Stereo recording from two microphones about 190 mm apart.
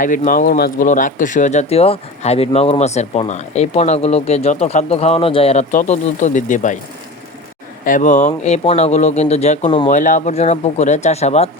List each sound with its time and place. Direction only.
0.0 s speech: 45° left (ahead or behind)
0.9 s speech: 40° left (ahead or behind)
7.9 s speech: 40° left (ahead or behind)